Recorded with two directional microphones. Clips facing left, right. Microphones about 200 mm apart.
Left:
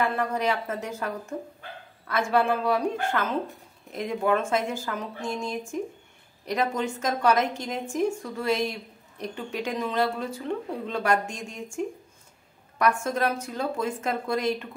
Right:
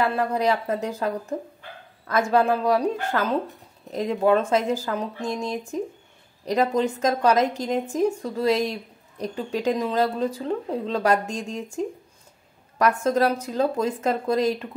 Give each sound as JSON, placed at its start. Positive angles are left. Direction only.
{"t": 0.0, "sound": "speech", "side_deg": -35}
{"t": 13.0, "sound": "speech", "side_deg": -35}